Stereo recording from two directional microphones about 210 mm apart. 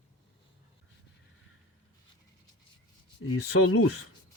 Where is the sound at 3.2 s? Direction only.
90° left.